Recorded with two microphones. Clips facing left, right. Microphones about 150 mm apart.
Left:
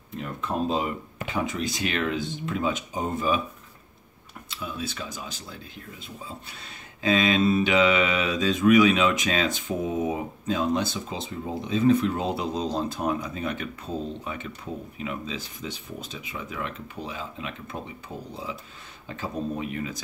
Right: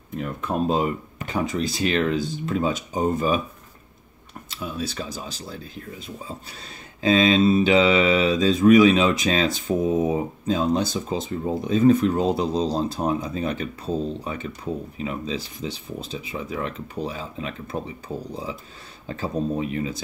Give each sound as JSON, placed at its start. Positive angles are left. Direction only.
{"t": 0.1, "sound": "speech", "side_deg": -45}
{"t": 1.3, "sound": "mantra", "side_deg": -35}
{"t": 4.5, "sound": "mantra", "side_deg": -40}
{"t": 19.0, "sound": "speech", "side_deg": -35}